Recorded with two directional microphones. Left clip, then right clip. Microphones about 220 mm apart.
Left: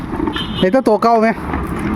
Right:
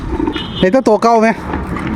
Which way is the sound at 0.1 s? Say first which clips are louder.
Right 2 dB; 5° right (ahead or behind).